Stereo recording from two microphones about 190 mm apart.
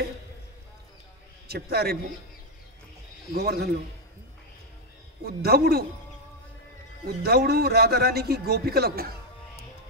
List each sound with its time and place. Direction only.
1.5 s a man's voice: 55° right (ahead or behind)
3.3 s a man's voice: 55° right (ahead or behind)
5.2 s a man's voice: 55° right (ahead or behind)
7.2 s a man's voice: 55° right (ahead or behind)